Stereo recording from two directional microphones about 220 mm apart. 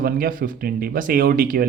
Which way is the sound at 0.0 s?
40° right (ahead or behind).